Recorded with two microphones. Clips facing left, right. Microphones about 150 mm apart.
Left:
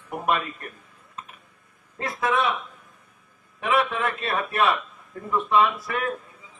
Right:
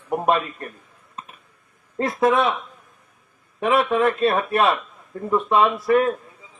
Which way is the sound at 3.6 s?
30° right (ahead or behind).